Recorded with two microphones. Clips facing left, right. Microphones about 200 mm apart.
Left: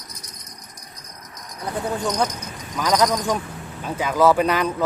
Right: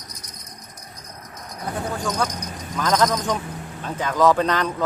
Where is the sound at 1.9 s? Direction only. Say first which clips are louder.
Left 2 dB; 20° left (ahead or behind).